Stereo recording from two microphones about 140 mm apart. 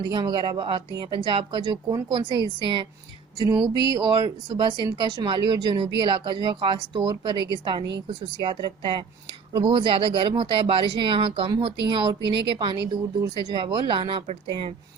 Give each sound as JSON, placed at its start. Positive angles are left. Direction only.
{"t": 0.0, "sound": "speech", "side_deg": -30}
{"t": 3.7, "sound": "speech", "side_deg": 35}
{"t": 3.9, "sound": "speech", "side_deg": -30}